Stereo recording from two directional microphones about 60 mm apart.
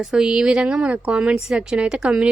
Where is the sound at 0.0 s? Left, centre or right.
Centre.